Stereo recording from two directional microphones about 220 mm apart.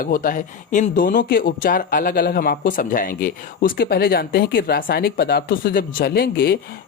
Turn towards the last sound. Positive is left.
turn(degrees=45)  # may be behind; listen again after turning